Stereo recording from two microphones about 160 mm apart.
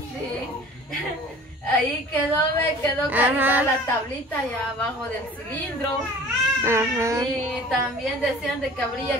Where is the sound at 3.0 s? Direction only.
10° right (ahead or behind).